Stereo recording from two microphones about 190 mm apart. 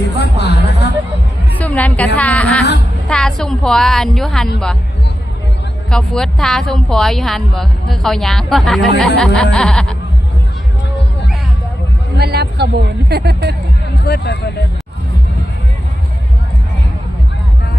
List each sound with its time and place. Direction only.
0.2 s a sound: 60° left (ahead or behind)
1.5 s a woman's voice: 10° left (ahead or behind)
5.9 s a woman's voice: 5° left (ahead or behind)
12.1 s speech: 60° right (ahead or behind)
14.0 s speech: 60° left (ahead or behind)